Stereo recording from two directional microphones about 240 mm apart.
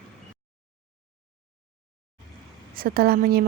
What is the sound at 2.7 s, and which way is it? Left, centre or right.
Speech, right.